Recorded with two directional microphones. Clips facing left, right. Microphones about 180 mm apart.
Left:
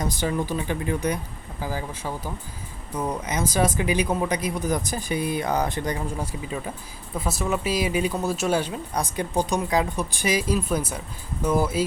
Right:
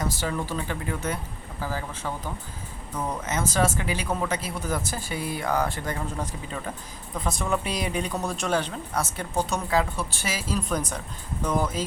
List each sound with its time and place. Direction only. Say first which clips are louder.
0.0 s speech: left 3 dB; 20° left (ahead or behind)